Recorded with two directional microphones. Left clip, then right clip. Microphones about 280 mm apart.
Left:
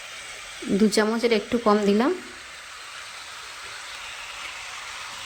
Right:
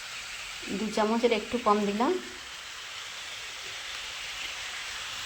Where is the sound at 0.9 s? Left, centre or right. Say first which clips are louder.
Even; left.